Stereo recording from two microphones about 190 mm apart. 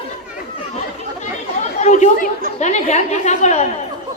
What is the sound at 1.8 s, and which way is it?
Chatter, 40° left (ahead or behind).